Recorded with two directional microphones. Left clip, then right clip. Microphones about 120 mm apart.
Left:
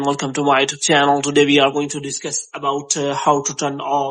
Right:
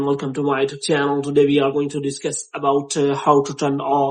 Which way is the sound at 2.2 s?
30° left (ahead or behind).